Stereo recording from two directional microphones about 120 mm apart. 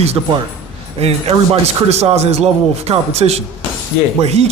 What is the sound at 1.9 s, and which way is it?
Speech, 60° right (ahead or behind).